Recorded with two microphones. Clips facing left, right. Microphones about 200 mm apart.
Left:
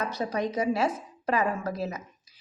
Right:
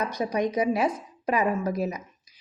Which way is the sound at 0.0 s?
15° right (ahead or behind).